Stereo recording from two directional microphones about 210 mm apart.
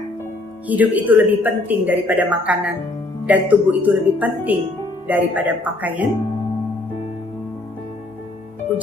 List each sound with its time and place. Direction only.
0.7 s speech: 10° right (ahead or behind)